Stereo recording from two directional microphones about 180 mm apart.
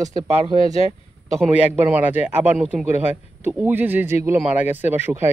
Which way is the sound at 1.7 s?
10° right (ahead or behind).